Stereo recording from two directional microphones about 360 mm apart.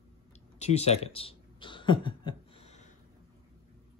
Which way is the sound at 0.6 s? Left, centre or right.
Centre.